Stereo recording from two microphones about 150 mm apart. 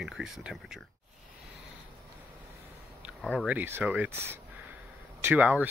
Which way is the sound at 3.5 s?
15° right (ahead or behind).